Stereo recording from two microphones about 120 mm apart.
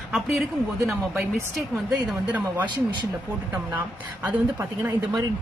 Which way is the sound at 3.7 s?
15° right (ahead or behind).